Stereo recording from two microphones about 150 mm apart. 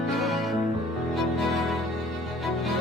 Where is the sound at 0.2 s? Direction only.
Centre (ahead or behind).